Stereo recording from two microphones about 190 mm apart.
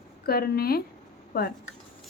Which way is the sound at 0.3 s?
55° left (ahead or behind).